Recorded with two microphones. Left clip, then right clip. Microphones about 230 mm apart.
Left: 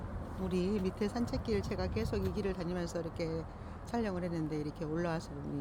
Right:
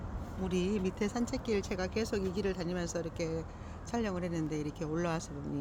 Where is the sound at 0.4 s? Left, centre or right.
Centre.